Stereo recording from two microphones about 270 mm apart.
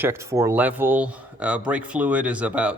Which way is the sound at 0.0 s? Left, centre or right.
Centre.